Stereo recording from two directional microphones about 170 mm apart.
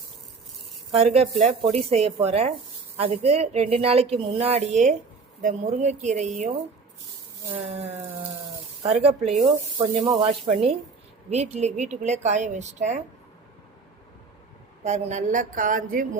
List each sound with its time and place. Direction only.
0.9 s speech: 35° right (ahead or behind)
8.8 s speech: 35° right (ahead or behind)
14.8 s speech: 45° right (ahead or behind)